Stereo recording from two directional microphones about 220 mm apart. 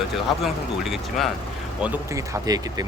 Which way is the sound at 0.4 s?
Centre (ahead or behind).